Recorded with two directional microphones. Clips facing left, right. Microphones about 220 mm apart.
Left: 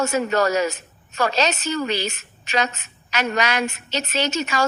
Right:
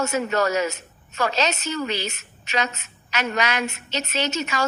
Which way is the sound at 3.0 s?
40° left (ahead or behind).